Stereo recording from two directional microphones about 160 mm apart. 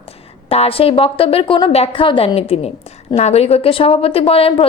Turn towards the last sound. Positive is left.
turn(degrees=35)  # may be behind; listen again after turning